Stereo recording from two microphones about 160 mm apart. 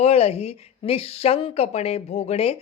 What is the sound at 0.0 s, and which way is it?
A woman's voice, 40° left (ahead or behind).